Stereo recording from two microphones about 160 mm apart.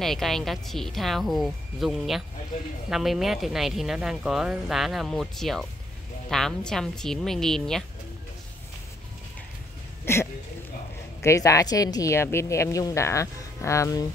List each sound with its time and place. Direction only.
0.0 s speech: centre (ahead or behind)
10.1 s speech: 15° left (ahead or behind)
11.2 s a woman's voice: 20° left (ahead or behind)